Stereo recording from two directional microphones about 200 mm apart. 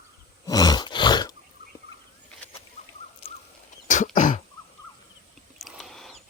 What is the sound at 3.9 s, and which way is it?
Throat clearing, 40° left (ahead or behind).